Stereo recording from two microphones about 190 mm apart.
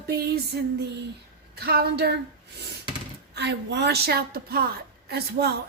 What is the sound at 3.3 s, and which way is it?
A woman's voice, 60° right (ahead or behind).